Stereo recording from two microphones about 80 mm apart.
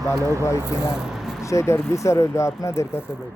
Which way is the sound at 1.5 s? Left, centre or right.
Left.